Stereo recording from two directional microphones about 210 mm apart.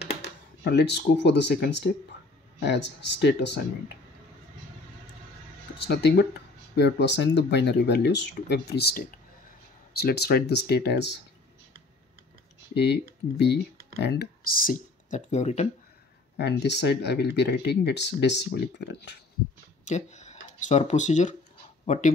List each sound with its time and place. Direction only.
0.0 s speech: 55° left (ahead or behind)
5.8 s speech: 55° left (ahead or behind)
12.7 s speech: 55° left (ahead or behind); by 15.7 s 30° left (ahead or behind)
16.3 s speech: 55° left (ahead or behind)
19.8 s speech: 35° left (ahead or behind)